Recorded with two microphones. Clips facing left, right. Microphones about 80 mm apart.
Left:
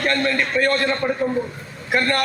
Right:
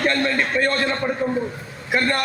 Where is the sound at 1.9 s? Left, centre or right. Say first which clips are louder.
Left 1 dB; centre.